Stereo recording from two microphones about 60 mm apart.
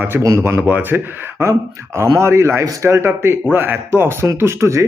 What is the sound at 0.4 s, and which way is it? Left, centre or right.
Speech, right.